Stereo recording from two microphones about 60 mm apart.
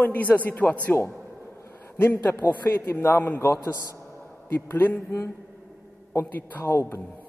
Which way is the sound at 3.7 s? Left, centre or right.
Left.